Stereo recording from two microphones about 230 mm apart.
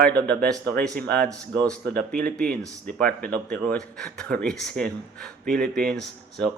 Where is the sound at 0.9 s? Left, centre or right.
Centre.